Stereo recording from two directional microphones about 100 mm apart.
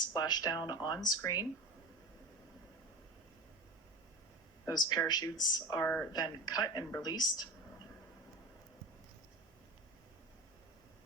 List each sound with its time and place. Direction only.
0.0 s speech: 40° left (ahead or behind)
4.6 s speech: 40° left (ahead or behind)
5.8 s speech: 25° left (ahead or behind)
6.1 s speech: 45° left (ahead or behind)